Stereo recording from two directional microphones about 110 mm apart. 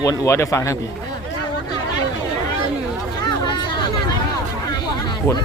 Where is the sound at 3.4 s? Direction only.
45° left (ahead or behind).